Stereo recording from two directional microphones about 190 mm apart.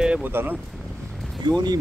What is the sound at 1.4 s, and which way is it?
Speech, 20° right (ahead or behind).